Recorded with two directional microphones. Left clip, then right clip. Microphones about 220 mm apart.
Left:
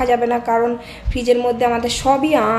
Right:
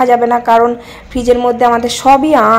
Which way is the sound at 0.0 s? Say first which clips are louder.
Right 7 dB; 20° right (ahead or behind).